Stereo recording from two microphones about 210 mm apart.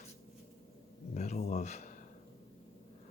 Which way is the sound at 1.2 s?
35° left (ahead or behind).